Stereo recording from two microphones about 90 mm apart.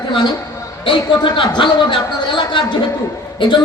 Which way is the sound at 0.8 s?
70° left (ahead or behind).